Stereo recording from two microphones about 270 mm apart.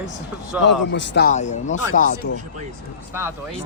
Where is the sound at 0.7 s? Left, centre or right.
Left.